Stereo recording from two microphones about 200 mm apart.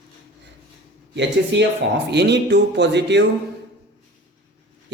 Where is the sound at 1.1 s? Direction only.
60° right (ahead or behind).